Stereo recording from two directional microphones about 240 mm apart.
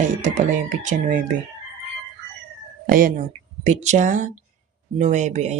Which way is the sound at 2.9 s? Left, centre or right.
Right.